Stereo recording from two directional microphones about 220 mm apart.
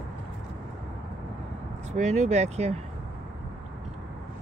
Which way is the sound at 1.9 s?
30° right (ahead or behind).